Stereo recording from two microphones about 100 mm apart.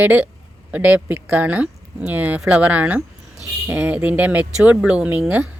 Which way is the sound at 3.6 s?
25° right (ahead or behind).